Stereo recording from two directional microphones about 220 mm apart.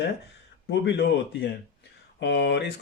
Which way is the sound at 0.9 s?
50° left (ahead or behind).